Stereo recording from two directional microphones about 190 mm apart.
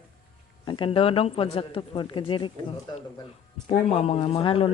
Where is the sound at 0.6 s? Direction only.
25° left (ahead or behind).